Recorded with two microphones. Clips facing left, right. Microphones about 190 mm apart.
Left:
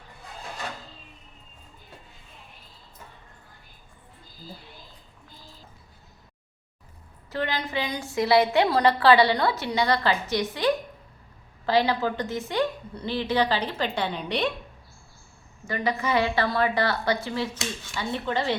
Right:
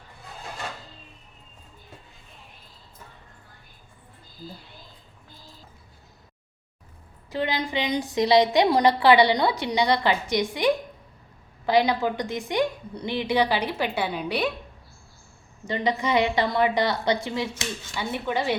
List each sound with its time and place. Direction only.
7.3 s a woman's voice: 15° right (ahead or behind)
15.6 s a woman's voice: 20° right (ahead or behind)